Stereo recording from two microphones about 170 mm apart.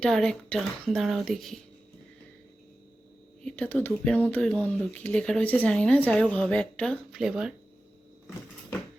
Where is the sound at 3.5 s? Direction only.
10° left (ahead or behind).